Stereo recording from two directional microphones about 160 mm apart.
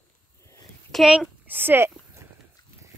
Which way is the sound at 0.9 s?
Centre (ahead or behind).